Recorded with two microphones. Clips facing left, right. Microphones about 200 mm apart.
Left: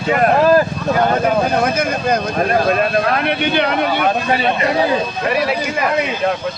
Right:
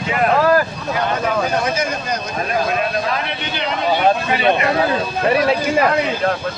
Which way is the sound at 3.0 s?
60° left (ahead or behind).